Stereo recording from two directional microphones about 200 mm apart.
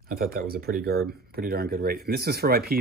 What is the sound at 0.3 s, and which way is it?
Speech, 50° right (ahead or behind).